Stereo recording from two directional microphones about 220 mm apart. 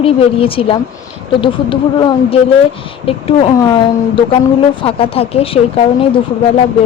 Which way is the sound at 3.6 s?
20° left (ahead or behind).